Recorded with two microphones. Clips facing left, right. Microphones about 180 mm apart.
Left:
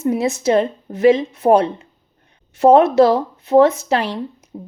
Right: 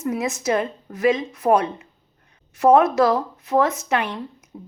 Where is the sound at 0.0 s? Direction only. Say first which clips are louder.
Left 6 dB; 30° left (ahead or behind).